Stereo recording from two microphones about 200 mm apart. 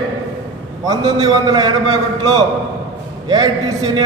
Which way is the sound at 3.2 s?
20° right (ahead or behind).